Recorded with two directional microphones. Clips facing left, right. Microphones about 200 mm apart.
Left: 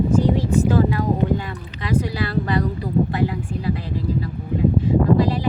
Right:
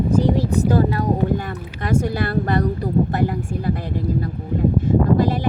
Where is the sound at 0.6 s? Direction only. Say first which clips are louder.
Even; 40° right (ahead or behind).